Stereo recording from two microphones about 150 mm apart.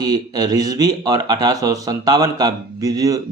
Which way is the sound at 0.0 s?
25° right (ahead or behind).